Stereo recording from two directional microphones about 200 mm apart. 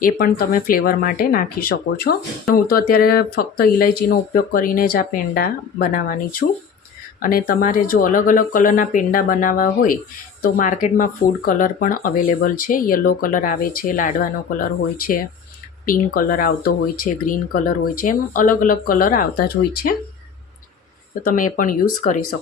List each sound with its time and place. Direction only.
0.0 s speech: 45° left (ahead or behind)
21.2 s speech: 40° left (ahead or behind)